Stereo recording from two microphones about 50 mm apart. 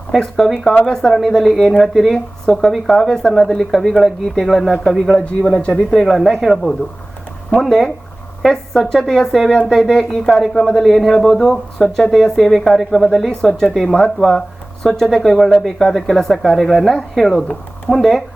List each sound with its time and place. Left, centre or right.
0.3 s speech: centre
2.1 s speech: centre
5.4 s speech: centre
5.9 s speech: centre
10.2 s speech: centre
14.2 s speech: centre
17.3 s speech: left
17.9 s speech: centre